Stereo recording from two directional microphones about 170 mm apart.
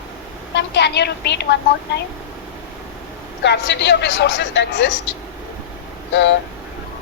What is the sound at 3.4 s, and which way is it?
Speech, 90° left.